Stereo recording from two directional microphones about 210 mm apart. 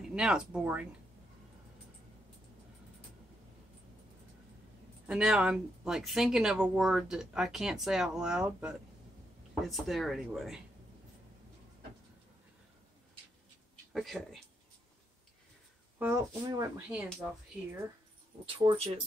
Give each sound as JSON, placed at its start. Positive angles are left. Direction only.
{"t": 0.0, "sound": "speech", "side_deg": -5}
{"t": 5.0, "sound": "speech", "side_deg": -5}
{"t": 13.9, "sound": "speech", "side_deg": 0}
{"t": 16.0, "sound": "speech", "side_deg": -15}
{"t": 18.6, "sound": "speech", "side_deg": -25}